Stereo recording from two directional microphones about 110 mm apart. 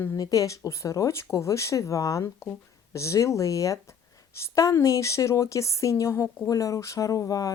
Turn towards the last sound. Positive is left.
turn(degrees=30)  # may be behind; listen again after turning